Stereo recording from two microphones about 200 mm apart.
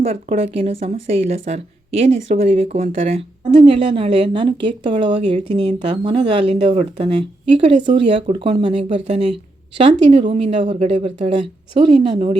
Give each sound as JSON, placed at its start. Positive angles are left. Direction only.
{"t": 0.0, "sound": "speech", "side_deg": -30}
{"t": 10.2, "sound": "speech", "side_deg": -30}